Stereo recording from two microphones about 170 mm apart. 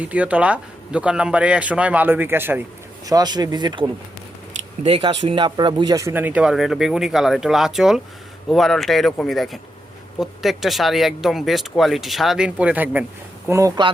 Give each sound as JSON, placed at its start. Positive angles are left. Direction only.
{"t": 0.0, "sound": "speech", "side_deg": -10}
{"t": 3.1, "sound": "speech", "side_deg": -25}